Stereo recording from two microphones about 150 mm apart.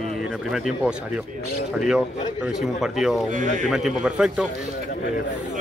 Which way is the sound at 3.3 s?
60° right (ahead or behind).